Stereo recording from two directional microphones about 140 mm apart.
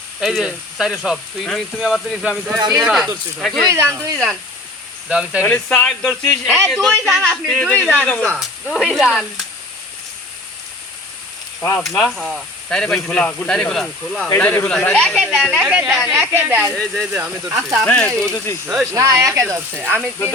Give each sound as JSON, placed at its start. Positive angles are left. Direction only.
{"t": 0.2, "sound": "speech", "side_deg": -5}
{"t": 2.6, "sound": "speech", "side_deg": -30}
{"t": 2.8, "sound": "speech", "side_deg": 0}
{"t": 3.7, "sound": "speech", "side_deg": -20}
{"t": 5.0, "sound": "speech", "side_deg": -10}
{"t": 5.6, "sound": "speech", "side_deg": 5}
{"t": 11.8, "sound": "speech", "side_deg": 0}
{"t": 14.3, "sound": "speech", "side_deg": 15}
{"t": 16.1, "sound": "speech", "side_deg": -15}
{"t": 16.7, "sound": "speech", "side_deg": 5}
{"t": 17.1, "sound": "speech", "side_deg": -15}
{"t": 17.8, "sound": "speech", "side_deg": 5}
{"t": 18.6, "sound": "speech", "side_deg": -5}
{"t": 18.9, "sound": "speech", "side_deg": -20}